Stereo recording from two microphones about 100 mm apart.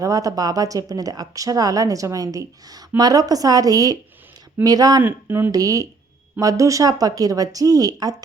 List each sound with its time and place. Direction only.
0.0 s speech: 35° right (ahead or behind)
5.0 s speech: 20° right (ahead or behind)
5.5 s speech: 35° right (ahead or behind)